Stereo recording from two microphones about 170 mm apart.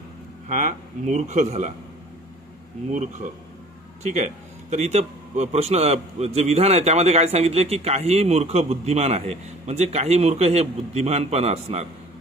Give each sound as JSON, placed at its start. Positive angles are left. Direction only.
{"t": 0.5, "sound": "speech", "side_deg": -45}
{"t": 2.9, "sound": "a man's voice", "side_deg": -45}